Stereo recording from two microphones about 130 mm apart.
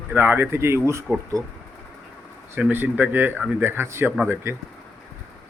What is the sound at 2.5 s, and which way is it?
Speech, 15° right (ahead or behind).